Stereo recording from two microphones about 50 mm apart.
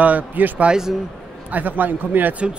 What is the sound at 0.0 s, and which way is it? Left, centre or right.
Speech, right.